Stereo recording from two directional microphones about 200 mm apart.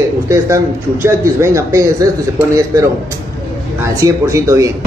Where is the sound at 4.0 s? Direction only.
15° right (ahead or behind).